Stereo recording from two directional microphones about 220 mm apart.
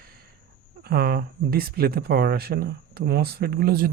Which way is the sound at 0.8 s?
45° right (ahead or behind).